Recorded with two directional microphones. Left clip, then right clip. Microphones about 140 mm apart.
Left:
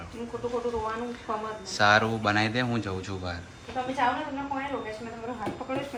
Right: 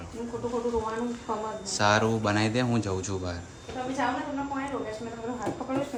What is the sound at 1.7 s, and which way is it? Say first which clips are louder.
Speech: left 2 dB; 10° right (ahead or behind).